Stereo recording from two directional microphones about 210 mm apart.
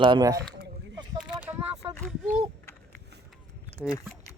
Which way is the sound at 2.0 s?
Centre (ahead or behind).